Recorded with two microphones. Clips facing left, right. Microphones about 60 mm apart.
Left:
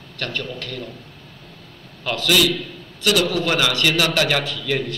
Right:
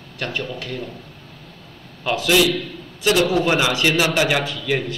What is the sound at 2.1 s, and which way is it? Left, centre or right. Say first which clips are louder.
A man's voice: right 2 dB; right.